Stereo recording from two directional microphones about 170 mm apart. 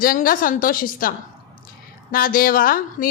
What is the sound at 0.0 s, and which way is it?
A woman's voice, 55° left (ahead or behind).